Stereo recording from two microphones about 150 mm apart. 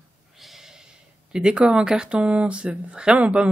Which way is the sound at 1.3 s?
5° right (ahead or behind).